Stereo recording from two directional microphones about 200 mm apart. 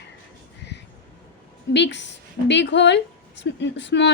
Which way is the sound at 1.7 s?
60° left (ahead or behind).